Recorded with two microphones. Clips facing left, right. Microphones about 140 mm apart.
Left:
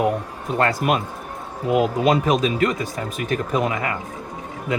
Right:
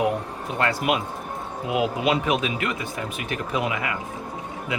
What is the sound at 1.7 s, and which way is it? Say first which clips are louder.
Speech: left 5 dB; 45° left (ahead or behind).